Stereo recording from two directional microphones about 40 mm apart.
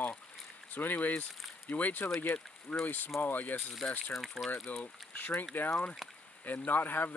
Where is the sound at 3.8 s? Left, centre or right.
Centre.